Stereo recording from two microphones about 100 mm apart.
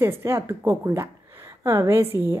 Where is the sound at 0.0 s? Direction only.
25° right (ahead or behind).